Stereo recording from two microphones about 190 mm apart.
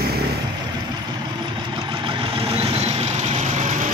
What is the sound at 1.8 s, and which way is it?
Vehicle, 25° right (ahead or behind).